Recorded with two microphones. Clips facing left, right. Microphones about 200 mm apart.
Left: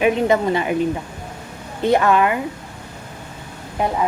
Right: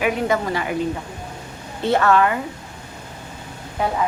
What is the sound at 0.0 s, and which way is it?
Speech, 20° left (ahead or behind).